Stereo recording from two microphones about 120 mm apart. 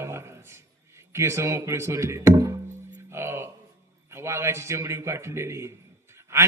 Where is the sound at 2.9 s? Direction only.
20° right (ahead or behind).